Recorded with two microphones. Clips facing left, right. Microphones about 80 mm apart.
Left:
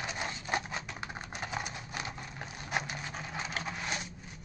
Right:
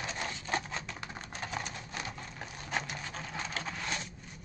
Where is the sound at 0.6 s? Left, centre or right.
Centre.